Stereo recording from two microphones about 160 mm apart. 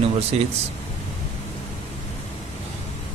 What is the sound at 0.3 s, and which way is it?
Speech, 40° right (ahead or behind).